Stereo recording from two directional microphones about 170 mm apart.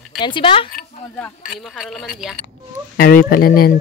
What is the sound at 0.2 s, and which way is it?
Speech, 30° left (ahead or behind).